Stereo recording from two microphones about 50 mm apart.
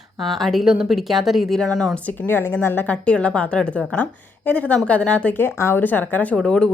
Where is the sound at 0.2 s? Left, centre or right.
Centre.